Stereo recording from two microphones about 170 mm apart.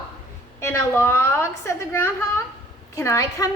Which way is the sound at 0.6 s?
15° left (ahead or behind).